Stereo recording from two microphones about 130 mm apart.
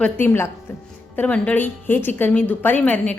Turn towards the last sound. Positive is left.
turn(degrees=10)  # may be behind; listen again after turning